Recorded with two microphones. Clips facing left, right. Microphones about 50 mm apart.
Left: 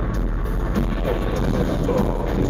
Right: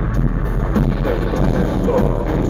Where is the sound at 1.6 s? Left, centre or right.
Right.